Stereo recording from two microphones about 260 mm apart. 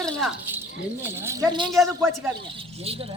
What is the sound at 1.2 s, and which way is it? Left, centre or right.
Speech, centre.